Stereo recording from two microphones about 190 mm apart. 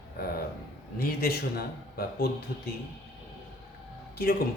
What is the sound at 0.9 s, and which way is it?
Speech, 55° left (ahead or behind).